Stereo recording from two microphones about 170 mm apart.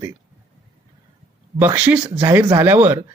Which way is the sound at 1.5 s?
10° right (ahead or behind).